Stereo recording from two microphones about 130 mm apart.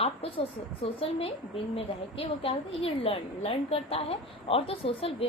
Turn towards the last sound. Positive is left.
turn(degrees=45)  # may be behind; listen again after turning